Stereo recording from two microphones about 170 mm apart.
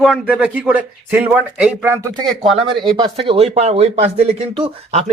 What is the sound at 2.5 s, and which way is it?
A man's voice, 30° right (ahead or behind).